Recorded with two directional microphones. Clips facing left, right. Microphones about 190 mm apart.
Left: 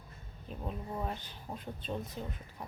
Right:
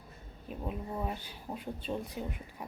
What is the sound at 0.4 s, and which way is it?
A woman's voice, 5° right (ahead or behind).